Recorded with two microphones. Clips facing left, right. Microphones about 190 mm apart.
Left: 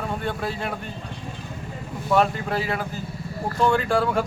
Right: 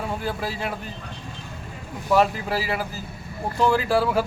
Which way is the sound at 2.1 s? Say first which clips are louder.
Right 1 dB; 5° right (ahead or behind).